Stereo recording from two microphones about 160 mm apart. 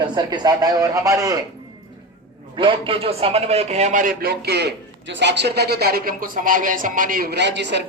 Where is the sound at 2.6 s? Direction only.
30° right (ahead or behind).